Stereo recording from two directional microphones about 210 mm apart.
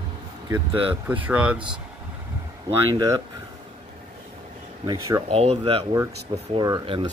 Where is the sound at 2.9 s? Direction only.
20° right (ahead or behind).